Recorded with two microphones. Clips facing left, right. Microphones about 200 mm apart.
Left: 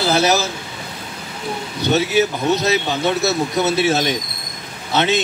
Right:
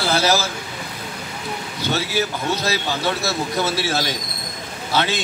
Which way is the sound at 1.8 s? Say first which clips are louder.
Left 7 dB; 20° left (ahead or behind).